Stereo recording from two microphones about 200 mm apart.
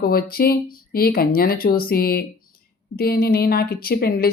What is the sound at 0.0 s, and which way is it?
A woman's voice, 50° left (ahead or behind).